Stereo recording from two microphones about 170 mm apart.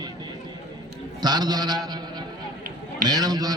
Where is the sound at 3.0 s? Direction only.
25° right (ahead or behind).